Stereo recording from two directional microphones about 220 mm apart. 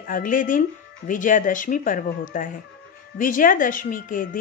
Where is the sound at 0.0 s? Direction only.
40° left (ahead or behind).